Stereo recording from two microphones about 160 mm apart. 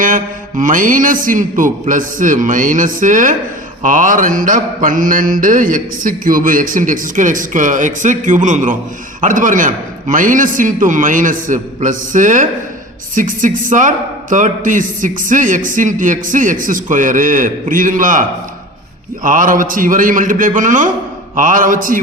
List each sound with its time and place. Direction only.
0.0 s a man's voice: 55° right (ahead or behind)